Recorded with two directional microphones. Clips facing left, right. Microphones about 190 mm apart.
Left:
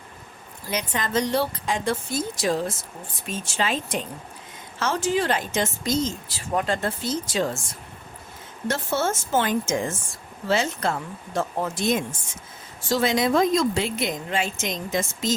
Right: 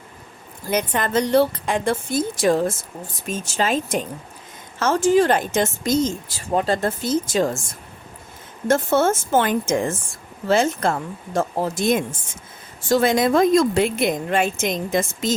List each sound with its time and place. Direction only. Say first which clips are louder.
0.7 s speech: right 5 dB; 55° right (ahead or behind)
3.2 s speech: right 4 dB; 45° right (ahead or behind)
6.5 s speech: right 4 dB; 30° right (ahead or behind)
6.8 s speech: right 5 dB; 45° right (ahead or behind)
8.6 s speech: right 7 dB; 50° right (ahead or behind)
11.3 s speech: right 4 dB; 40° right (ahead or behind)
11.8 s speech: right 4 dB; 55° right (ahead or behind)